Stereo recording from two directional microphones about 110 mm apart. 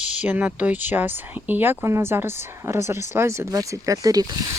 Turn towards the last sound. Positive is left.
turn(degrees=-35)  # may be behind; listen again after turning